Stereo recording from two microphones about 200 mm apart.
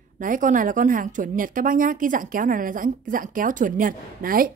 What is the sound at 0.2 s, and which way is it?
Speech, 40° right (ahead or behind).